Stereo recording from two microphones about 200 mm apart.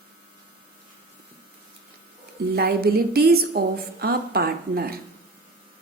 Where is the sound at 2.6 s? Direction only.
50° right (ahead or behind).